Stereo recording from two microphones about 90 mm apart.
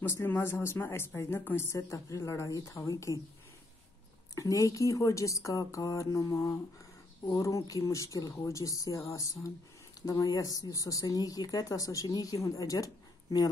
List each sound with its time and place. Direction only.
0.0 s speech: 25° left (ahead or behind)
4.4 s speech: 40° left (ahead or behind)